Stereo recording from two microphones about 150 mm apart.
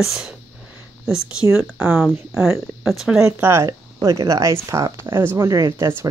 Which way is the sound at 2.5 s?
Centre (ahead or behind).